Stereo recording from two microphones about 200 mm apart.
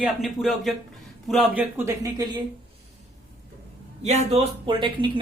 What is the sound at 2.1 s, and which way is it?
Speech, 20° right (ahead or behind).